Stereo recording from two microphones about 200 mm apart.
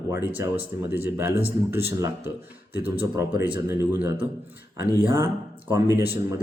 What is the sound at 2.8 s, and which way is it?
Speech, 25° right (ahead or behind).